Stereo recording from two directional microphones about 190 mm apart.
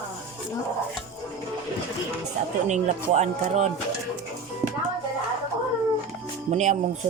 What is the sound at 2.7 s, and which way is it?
Speech, 35° right (ahead or behind).